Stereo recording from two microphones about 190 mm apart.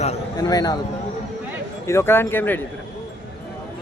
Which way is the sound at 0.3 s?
20° left (ahead or behind).